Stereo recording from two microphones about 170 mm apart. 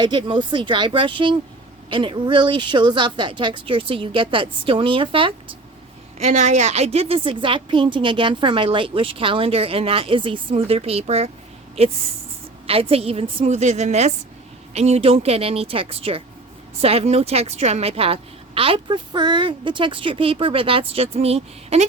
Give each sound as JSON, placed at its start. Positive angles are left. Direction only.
{"t": 0.0, "sound": "a woman's voice", "side_deg": -25}